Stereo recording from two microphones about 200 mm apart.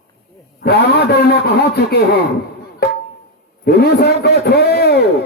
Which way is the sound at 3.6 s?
55° left (ahead or behind).